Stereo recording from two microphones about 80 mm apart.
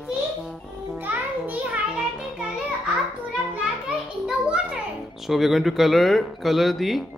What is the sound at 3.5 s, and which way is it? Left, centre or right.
Children playing, centre.